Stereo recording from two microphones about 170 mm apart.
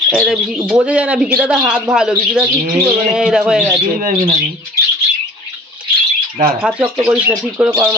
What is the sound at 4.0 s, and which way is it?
Speech, 50° right (ahead or behind).